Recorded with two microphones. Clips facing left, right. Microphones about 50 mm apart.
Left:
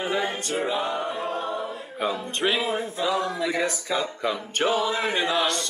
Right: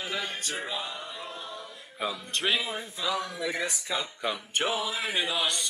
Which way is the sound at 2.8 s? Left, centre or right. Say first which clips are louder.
Left 6 dB; left.